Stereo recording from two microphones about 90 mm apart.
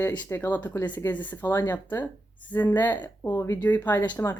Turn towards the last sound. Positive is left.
turn(degrees=20)  # may be behind; listen again after turning